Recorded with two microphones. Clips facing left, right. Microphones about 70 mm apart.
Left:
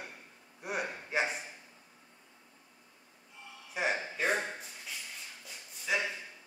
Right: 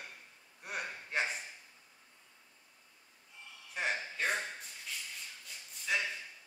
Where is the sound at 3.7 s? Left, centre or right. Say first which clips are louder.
Left 3 dB; centre.